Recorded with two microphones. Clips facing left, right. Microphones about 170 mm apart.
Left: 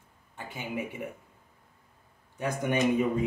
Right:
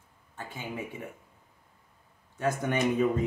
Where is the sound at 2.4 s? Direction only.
15° left (ahead or behind).